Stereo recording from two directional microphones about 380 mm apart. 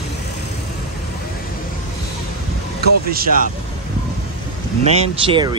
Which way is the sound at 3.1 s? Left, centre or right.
Right.